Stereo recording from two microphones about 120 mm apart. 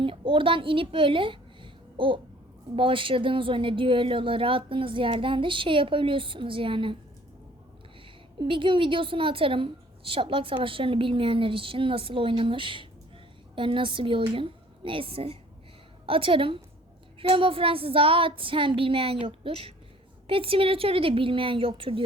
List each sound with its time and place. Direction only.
0.0 s a woman's voice: 45° right (ahead or behind)
8.4 s a woman's voice: 45° right (ahead or behind)